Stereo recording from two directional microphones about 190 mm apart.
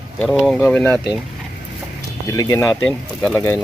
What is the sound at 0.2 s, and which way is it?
Speech, 5° left (ahead or behind).